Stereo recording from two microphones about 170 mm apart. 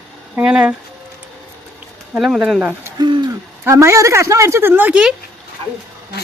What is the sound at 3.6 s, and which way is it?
Speech, 15° right (ahead or behind).